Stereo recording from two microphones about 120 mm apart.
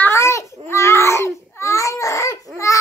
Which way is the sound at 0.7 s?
25° left (ahead or behind).